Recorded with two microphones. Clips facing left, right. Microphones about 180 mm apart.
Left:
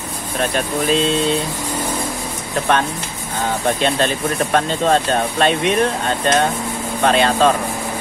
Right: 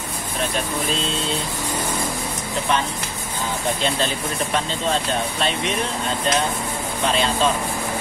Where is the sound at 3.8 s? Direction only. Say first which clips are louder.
Left 5 dB; 55° left (ahead or behind).